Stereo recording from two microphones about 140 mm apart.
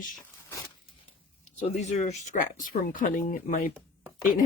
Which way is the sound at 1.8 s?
55° left (ahead or behind).